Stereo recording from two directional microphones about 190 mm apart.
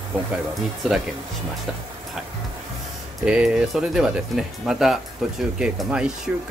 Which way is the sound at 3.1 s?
5° right (ahead or behind).